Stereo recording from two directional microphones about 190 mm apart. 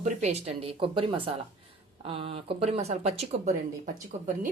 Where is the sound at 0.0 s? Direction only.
35° right (ahead or behind).